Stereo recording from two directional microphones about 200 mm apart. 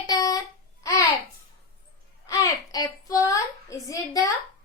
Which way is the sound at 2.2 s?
15° left (ahead or behind).